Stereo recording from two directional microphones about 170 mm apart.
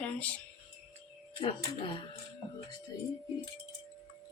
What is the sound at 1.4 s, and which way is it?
Speech, 30° left (ahead or behind).